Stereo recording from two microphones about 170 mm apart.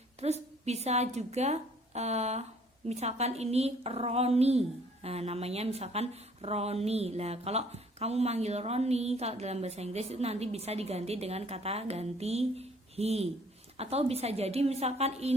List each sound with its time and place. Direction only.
0.2 s a woman's voice: 40° right (ahead or behind)